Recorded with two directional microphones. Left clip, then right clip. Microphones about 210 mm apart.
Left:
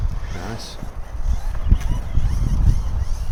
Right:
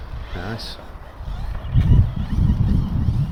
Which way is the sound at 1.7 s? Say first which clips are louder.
Right 7 dB; 15° left (ahead or behind).